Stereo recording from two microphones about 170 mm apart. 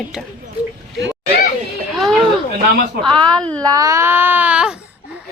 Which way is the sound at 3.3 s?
5° left (ahead or behind).